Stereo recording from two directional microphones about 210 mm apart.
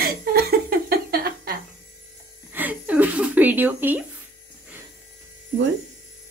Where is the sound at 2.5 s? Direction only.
10° right (ahead or behind).